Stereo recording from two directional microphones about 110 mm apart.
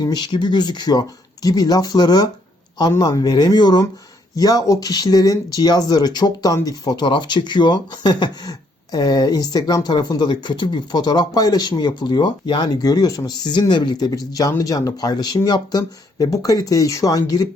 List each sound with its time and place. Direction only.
0.0 s speech: 40° left (ahead or behind)